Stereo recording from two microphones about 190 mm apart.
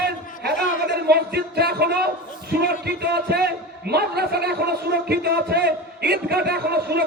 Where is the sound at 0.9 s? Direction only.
55° right (ahead or behind).